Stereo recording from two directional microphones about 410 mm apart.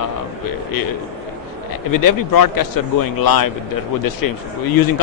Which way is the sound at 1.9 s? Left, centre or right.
Left.